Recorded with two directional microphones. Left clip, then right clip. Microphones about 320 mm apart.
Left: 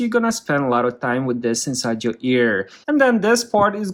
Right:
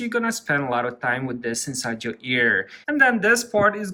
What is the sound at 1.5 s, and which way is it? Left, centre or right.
Speech, centre.